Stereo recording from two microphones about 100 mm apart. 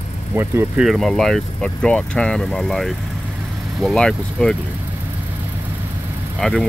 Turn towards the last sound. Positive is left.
turn(degrees=5)  # may be behind; listen again after turning